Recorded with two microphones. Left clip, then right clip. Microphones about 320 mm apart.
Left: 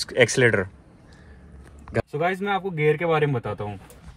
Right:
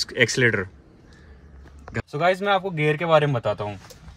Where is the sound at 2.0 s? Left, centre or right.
Centre.